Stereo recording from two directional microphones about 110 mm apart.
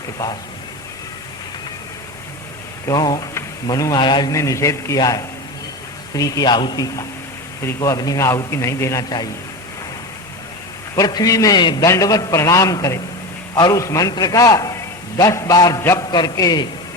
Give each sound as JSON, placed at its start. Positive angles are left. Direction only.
{"t": 2.8, "sound": "a man's voice", "side_deg": 35}
{"t": 4.3, "sound": "a man's voice", "side_deg": 30}
{"t": 10.9, "sound": "a man's voice", "side_deg": 35}
{"t": 15.8, "sound": "a man's voice", "side_deg": 25}
{"t": 16.0, "sound": "a man's voice", "side_deg": 40}